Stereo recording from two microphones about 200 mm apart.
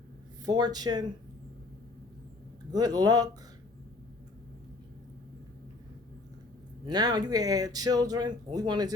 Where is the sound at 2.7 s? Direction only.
20° right (ahead or behind).